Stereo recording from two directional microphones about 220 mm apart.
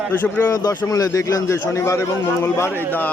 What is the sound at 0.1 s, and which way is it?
A man's voice, 10° left (ahead or behind).